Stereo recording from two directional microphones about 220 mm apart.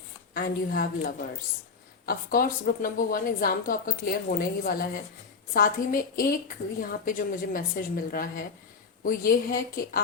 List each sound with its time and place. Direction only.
0.3 s a woman's voice: 40° left (ahead or behind)